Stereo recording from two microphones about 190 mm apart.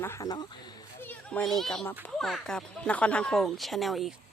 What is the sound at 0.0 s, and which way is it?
Speech, 15° left (ahead or behind).